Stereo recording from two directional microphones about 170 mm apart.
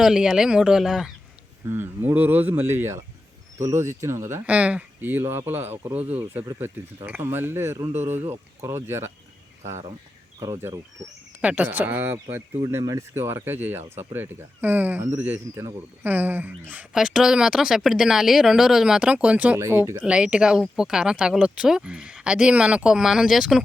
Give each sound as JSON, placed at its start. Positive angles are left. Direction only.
{"t": 0.0, "sound": "speech", "side_deg": -5}
{"t": 1.6, "sound": "speech", "side_deg": -15}
{"t": 10.4, "sound": "speech", "side_deg": -15}